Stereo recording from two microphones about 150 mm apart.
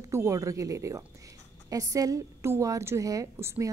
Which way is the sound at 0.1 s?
20° right (ahead or behind).